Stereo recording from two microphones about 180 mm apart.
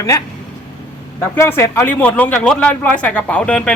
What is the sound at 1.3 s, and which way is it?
Speech, 15° left (ahead or behind).